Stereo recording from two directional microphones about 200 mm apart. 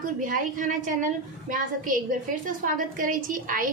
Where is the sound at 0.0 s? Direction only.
40° right (ahead or behind).